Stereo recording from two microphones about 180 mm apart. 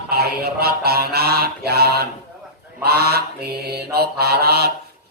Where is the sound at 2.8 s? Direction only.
65° right (ahead or behind).